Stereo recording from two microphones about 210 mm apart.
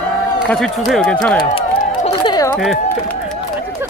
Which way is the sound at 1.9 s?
25° left (ahead or behind).